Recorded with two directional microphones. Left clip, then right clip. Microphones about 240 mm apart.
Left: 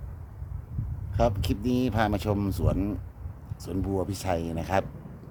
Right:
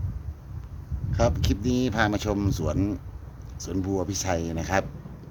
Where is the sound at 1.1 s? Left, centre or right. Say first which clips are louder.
Right 1 dB; centre.